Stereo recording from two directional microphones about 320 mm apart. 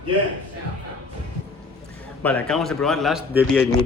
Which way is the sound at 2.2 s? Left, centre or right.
Centre.